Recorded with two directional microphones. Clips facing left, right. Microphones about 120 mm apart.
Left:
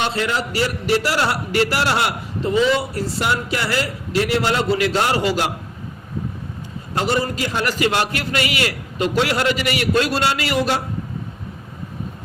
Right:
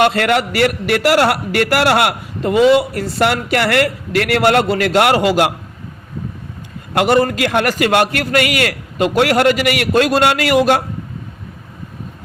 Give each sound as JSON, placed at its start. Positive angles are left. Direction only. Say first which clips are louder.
{"t": 0.0, "sound": "a man's voice", "louder": "right 8 dB", "side_deg": -65}
{"t": 6.9, "sound": "a man's voice", "louder": "right 7 dB", "side_deg": -60}